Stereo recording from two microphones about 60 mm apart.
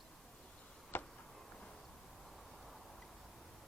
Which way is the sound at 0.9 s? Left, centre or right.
Left.